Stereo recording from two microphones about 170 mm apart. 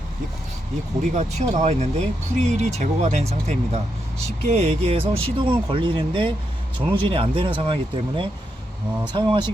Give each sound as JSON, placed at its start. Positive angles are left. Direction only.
{"t": 1.1, "sound": "speech", "side_deg": -40}